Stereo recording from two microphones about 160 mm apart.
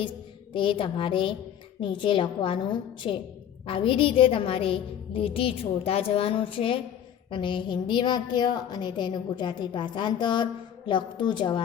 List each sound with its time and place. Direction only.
0.5 s a woman's voice: 30° left (ahead or behind)